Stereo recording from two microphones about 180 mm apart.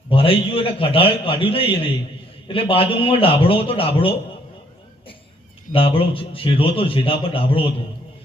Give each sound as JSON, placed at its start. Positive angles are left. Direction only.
{"t": 0.1, "sound": "a man's voice", "side_deg": 30}
{"t": 5.7, "sound": "a man's voice", "side_deg": 30}